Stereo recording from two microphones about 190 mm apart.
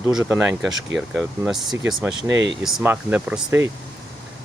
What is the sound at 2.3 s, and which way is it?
Speech, 70° right (ahead or behind).